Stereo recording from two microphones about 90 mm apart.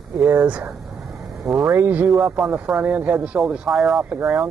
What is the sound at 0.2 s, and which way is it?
Speech, 10° right (ahead or behind).